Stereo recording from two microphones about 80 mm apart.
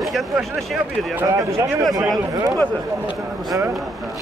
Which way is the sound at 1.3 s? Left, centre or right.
Right.